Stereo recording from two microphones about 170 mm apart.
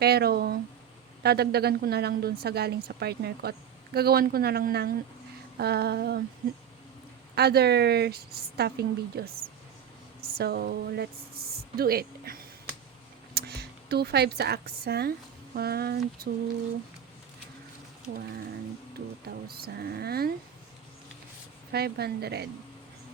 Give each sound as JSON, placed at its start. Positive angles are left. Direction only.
{"t": 0.0, "sound": "a sound", "side_deg": -70}
{"t": 1.2, "sound": "a woman's voice", "side_deg": -70}
{"t": 7.3, "sound": "a woman's voice", "side_deg": -70}
{"t": 18.0, "sound": "speech", "side_deg": -60}
{"t": 19.5, "sound": "speech", "side_deg": -65}
{"t": 21.7, "sound": "a woman's voice", "side_deg": -70}